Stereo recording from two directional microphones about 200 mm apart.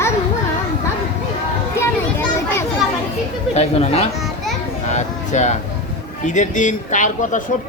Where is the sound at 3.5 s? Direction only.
30° left (ahead or behind).